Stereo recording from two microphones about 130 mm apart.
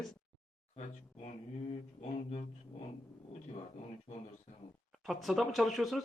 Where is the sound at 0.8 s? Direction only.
55° left (ahead or behind).